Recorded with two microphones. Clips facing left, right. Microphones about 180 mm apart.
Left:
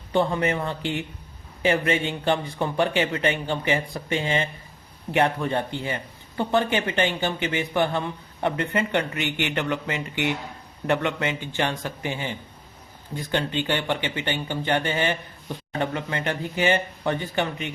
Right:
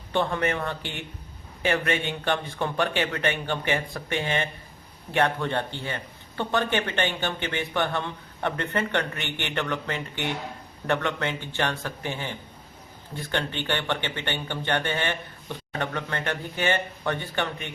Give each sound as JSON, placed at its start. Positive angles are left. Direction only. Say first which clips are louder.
{"t": 0.1, "sound": "speech", "louder": "left 3 dB", "side_deg": 15}